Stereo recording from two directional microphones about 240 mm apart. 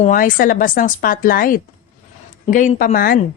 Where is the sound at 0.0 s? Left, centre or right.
Left.